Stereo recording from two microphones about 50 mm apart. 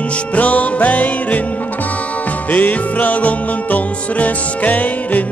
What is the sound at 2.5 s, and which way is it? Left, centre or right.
Music, left.